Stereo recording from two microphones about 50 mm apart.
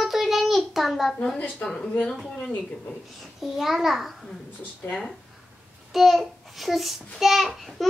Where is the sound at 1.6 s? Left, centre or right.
Centre.